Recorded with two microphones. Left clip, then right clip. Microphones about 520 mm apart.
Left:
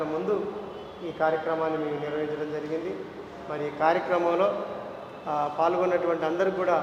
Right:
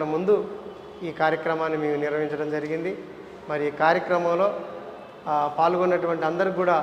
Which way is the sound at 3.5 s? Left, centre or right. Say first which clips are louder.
Right 3 dB; right.